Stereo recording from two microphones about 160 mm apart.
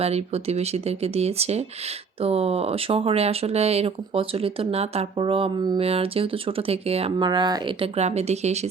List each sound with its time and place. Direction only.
0.0 s speech: 40° right (ahead or behind)
7.3 s speech: 25° right (ahead or behind)
7.9 s speech: 40° right (ahead or behind)